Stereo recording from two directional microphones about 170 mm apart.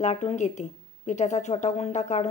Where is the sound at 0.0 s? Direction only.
40° left (ahead or behind).